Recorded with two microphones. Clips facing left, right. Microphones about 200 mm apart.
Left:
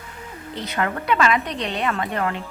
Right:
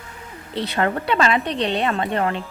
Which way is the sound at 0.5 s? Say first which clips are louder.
Right 4 dB; 30° right (ahead or behind).